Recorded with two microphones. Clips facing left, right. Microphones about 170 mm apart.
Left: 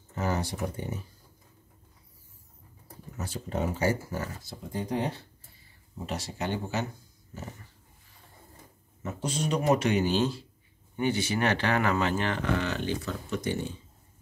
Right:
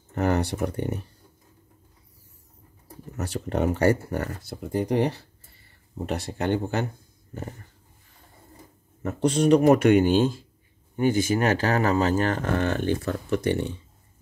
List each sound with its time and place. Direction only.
0.1 s speech: 65° right (ahead or behind)
3.2 s speech: 70° right (ahead or behind)
6.0 s speech: 60° right (ahead or behind)
9.0 s speech: 60° right (ahead or behind)